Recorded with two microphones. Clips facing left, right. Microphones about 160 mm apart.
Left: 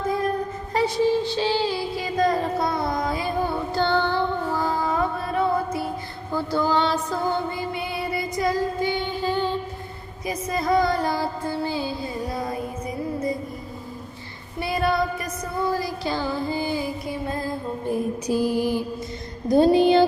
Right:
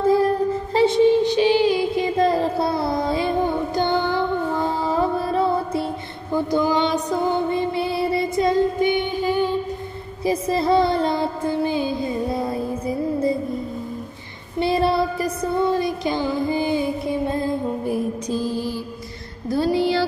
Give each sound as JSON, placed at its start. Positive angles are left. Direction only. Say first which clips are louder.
{"t": 0.7, "sound": "child singing", "louder": "right 5 dB", "side_deg": -25}
{"t": 4.6, "sound": "music", "louder": "right 2 dB", "side_deg": -30}
{"t": 6.3, "sound": "music", "louder": "right 3 dB", "side_deg": -15}
{"t": 10.2, "sound": "music", "louder": "right 5 dB", "side_deg": -30}
{"t": 14.6, "sound": "a sound", "louder": "right 4 dB", "side_deg": -30}
{"t": 18.2, "sound": "mantra", "louder": "left 2 dB", "side_deg": 10}
{"t": 19.4, "sound": "speech", "louder": "left 4 dB", "side_deg": 20}